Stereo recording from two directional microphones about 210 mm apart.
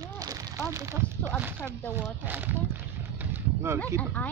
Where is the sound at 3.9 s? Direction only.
10° left (ahead or behind).